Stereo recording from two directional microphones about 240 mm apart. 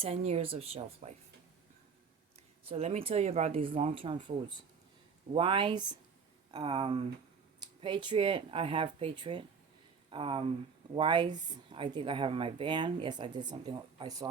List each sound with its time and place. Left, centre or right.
0.0 s speech: right
2.6 s speech: right